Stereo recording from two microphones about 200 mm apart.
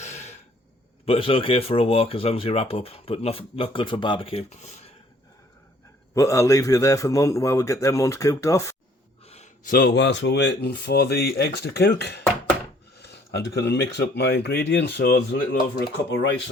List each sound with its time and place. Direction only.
0.0 s throat clearing: 35° left (ahead or behind)
1.0 s speech: 30° left (ahead or behind)
6.1 s a man's voice: 15° left (ahead or behind)
9.2 s speech: 30° left (ahead or behind); by 16.4 s 55° left (ahead or behind)